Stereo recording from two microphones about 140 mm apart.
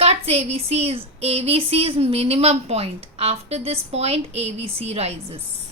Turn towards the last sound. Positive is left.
turn(degrees=-50)  # may be behind; listen again after turning